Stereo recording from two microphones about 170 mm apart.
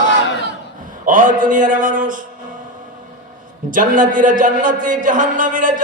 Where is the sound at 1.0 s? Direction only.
50° right (ahead or behind).